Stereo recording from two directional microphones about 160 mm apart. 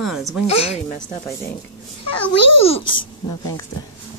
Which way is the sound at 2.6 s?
35° left (ahead or behind).